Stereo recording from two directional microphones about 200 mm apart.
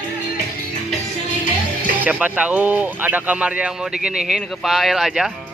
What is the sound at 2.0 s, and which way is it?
Speech, 5° right (ahead or behind).